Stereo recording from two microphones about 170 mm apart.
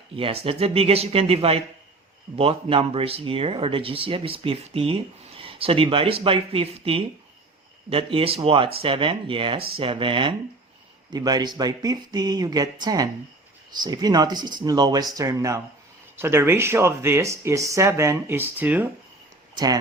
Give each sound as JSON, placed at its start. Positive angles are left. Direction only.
{"t": 0.2, "sound": "speech", "side_deg": -35}